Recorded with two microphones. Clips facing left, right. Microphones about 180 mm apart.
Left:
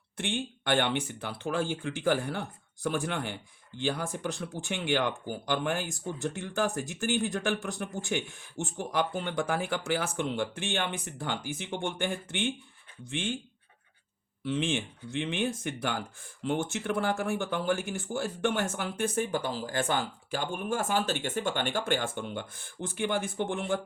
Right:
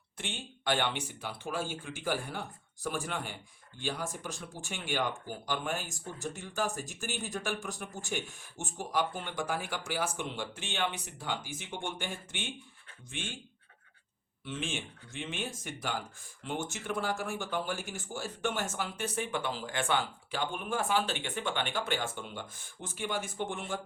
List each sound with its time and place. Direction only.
0.2 s speech: 55° left (ahead or behind)
14.4 s speech: 60° left (ahead or behind)